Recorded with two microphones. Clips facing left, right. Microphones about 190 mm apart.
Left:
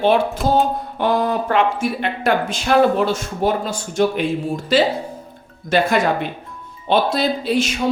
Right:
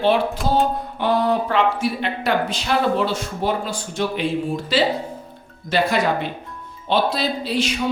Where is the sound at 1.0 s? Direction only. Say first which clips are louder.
Even; 45° left (ahead or behind).